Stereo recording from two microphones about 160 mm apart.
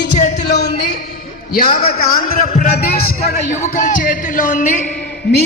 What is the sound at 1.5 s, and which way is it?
A man's voice, 65° left (ahead or behind).